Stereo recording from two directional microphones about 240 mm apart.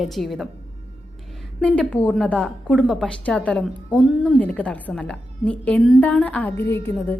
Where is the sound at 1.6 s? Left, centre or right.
Centre.